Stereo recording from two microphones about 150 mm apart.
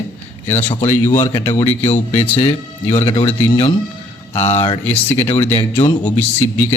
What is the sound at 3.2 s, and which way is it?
Speech, 40° left (ahead or behind).